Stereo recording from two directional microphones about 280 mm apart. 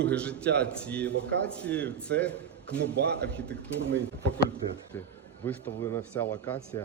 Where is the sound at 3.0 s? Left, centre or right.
Right.